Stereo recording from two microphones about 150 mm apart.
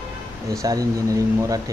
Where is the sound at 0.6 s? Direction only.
25° right (ahead or behind).